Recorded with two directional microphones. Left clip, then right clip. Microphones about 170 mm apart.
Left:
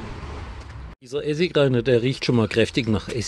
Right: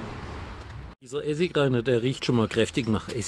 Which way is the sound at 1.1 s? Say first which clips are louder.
Left 4 dB; 15° left (ahead or behind).